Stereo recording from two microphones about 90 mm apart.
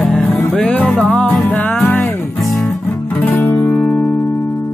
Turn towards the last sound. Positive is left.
turn(degrees=25)  # may be behind; listen again after turning